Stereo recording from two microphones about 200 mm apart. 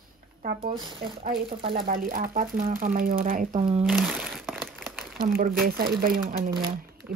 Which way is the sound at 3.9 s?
5° right (ahead or behind).